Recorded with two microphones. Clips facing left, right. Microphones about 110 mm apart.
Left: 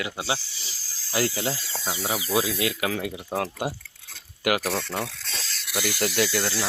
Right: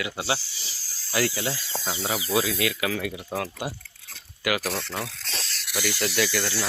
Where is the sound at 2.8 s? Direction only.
35° left (ahead or behind).